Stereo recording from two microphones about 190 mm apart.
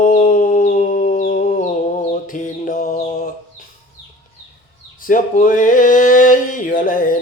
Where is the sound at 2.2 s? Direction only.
45° left (ahead or behind).